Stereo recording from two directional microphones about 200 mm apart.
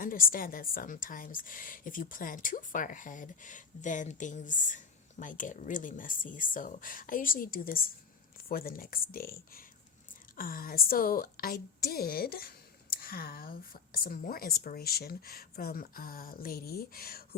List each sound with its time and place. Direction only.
0.0 s a woman's voice: 45° left (ahead or behind)